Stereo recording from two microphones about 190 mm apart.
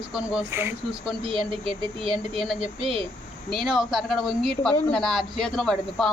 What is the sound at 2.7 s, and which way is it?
Speech, 30° right (ahead or behind).